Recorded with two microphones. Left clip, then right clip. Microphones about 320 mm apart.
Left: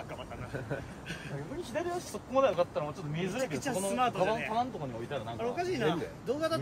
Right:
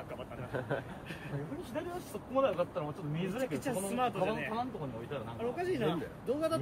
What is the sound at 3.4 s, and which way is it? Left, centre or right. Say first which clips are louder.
Speech: left 2 dB; centre.